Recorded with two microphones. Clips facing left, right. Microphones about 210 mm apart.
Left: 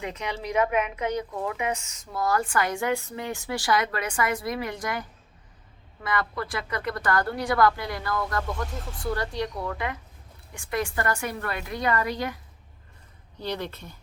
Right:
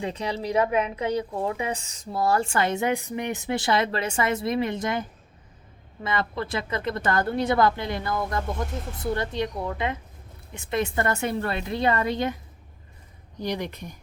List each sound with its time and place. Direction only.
0.0 s a woman's voice: 30° right (ahead or behind)
13.4 s speech: 15° right (ahead or behind)